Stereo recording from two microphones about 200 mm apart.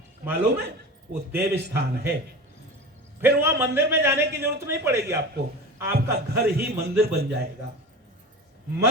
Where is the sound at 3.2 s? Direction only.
10° right (ahead or behind).